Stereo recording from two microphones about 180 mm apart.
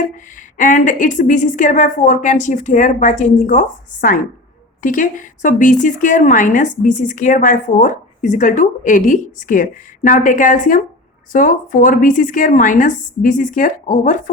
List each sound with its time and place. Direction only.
0.5 s a woman's voice: 45° left (ahead or behind)